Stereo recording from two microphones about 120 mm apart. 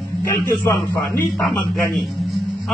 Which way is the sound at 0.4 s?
20° left (ahead or behind).